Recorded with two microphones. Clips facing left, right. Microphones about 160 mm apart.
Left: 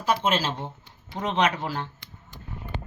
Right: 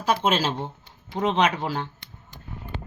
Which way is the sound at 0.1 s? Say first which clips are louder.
Right 2 dB; 30° right (ahead or behind).